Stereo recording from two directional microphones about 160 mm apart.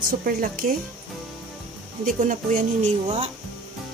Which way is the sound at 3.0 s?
40° right (ahead or behind).